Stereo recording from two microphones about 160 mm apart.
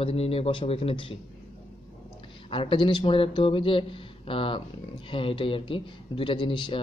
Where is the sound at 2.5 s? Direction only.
30° left (ahead or behind).